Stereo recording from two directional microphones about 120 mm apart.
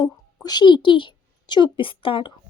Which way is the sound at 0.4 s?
40° left (ahead or behind).